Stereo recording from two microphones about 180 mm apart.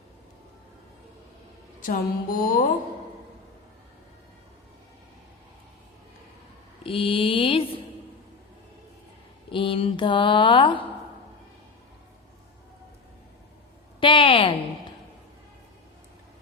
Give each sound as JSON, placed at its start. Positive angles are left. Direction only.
{"t": 1.8, "sound": "music", "side_deg": 50}
{"t": 6.8, "sound": "speech", "side_deg": 30}
{"t": 9.5, "sound": "speech", "side_deg": 30}
{"t": 14.0, "sound": "speech", "side_deg": 30}